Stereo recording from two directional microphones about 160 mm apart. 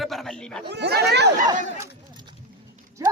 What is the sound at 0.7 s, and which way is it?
Speech, 90° right.